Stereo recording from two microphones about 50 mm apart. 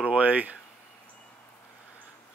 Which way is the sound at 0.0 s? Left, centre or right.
Right.